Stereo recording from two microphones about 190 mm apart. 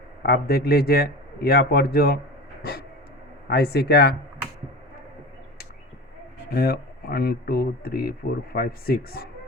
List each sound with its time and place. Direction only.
0.2 s speech: 55° left (ahead or behind)
3.5 s speech: 60° left (ahead or behind)
6.5 s speech: 55° left (ahead or behind)